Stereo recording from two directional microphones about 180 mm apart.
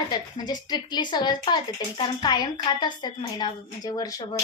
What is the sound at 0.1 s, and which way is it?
Speech, 20° left (ahead or behind).